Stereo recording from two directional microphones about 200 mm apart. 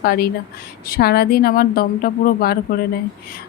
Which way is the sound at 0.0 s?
50° left (ahead or behind).